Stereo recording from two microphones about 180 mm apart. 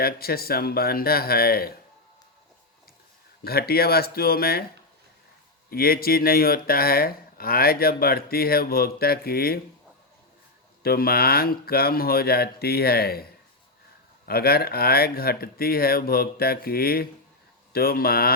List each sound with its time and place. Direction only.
0.0 s speech: 55° left (ahead or behind)
3.4 s speech: 60° left (ahead or behind)
5.7 s speech: 55° left (ahead or behind)
10.8 s speech: 60° left (ahead or behind)
14.3 s speech: 60° left (ahead or behind)